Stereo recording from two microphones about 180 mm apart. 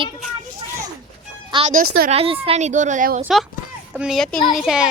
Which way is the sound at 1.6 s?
50° right (ahead or behind).